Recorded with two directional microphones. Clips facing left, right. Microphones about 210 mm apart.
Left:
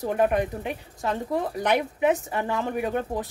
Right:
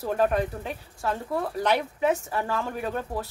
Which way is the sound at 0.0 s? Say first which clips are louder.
Left 1 dB; 15° left (ahead or behind).